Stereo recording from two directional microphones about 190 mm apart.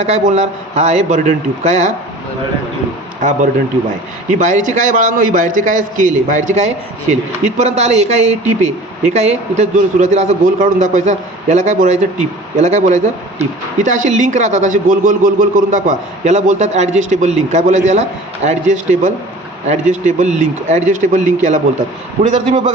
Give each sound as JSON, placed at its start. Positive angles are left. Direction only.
{"t": 0.0, "sound": "speech", "side_deg": -35}
{"t": 4.3, "sound": "speech", "side_deg": -40}